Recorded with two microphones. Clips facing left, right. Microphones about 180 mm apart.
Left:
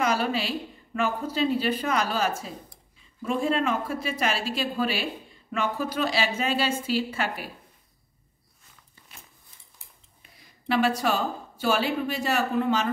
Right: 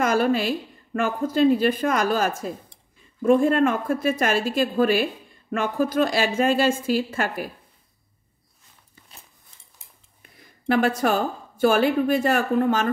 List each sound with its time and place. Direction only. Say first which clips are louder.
0.0 s a woman's voice: right 5 dB; 50° right (ahead or behind)
10.2 s a woman's voice: right 7 dB; 50° right (ahead or behind)